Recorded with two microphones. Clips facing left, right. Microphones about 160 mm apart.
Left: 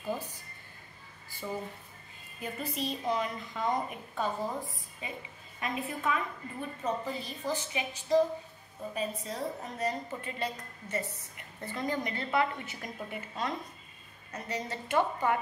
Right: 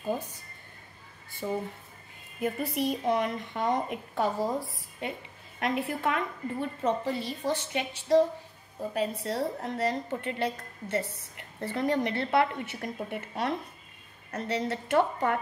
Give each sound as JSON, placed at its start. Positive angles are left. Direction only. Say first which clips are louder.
{"t": 1.4, "sound": "speech", "louder": "right 5 dB", "side_deg": -30}
{"t": 2.4, "sound": "a woman's voice", "louder": "right 7 dB", "side_deg": -65}
{"t": 4.2, "sound": "a woman's voice", "louder": "right 5 dB", "side_deg": -80}
{"t": 9.2, "sound": "a woman's voice", "louder": "right 6 dB", "side_deg": -75}